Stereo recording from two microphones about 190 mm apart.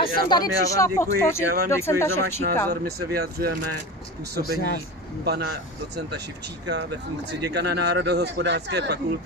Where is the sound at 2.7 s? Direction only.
55° right (ahead or behind).